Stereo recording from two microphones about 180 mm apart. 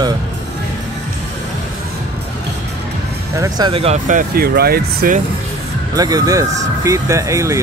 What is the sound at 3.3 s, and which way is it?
Speech, 20° right (ahead or behind).